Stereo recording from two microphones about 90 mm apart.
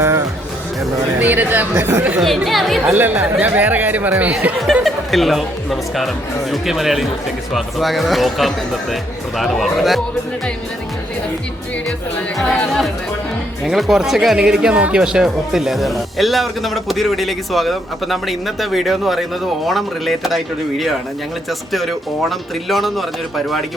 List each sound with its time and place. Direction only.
1.2 s speech: 20° right (ahead or behind)
2.2 s speech: centre (ahead or behind)
2.9 s speech: 20° right (ahead or behind)
4.6 s speech: centre (ahead or behind)
12.4 s speech: 5° left (ahead or behind)